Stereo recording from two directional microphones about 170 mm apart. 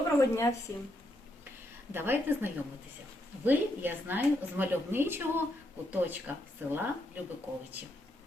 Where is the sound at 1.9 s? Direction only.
10° right (ahead or behind).